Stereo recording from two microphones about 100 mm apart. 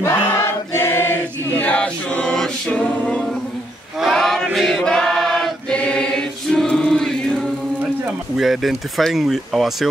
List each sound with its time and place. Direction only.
0.0 s choir: 25° left (ahead or behind)
1.6 s a capella: 15° left (ahead or behind)
4.0 s male singing: 5° left (ahead or behind)
4.6 s choir: centre (ahead or behind)
8.4 s speech: centre (ahead or behind)